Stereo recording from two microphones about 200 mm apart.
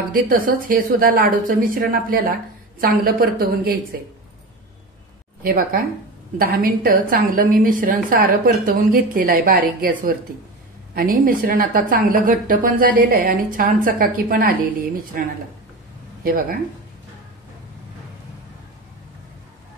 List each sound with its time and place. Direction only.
0.1 s a woman's voice: 45° right (ahead or behind)
5.4 s a woman's voice: 45° right (ahead or behind)